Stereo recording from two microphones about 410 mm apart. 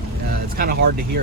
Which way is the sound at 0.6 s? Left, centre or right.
Right.